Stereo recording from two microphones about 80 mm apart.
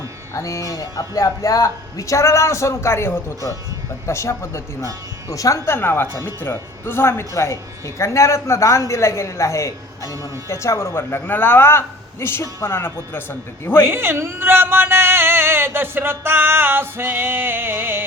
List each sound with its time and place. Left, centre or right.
0.3 s speech: left
13.8 s speech: right